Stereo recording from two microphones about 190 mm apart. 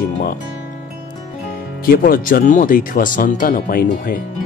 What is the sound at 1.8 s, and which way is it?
Speech, 50° left (ahead or behind).